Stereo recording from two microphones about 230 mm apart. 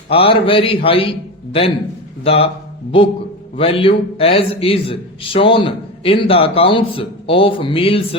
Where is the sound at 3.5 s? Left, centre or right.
Left.